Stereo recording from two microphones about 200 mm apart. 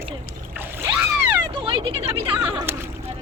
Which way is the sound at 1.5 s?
25° right (ahead or behind).